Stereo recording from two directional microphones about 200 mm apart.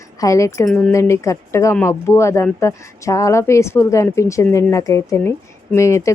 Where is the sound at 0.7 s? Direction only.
5° left (ahead or behind).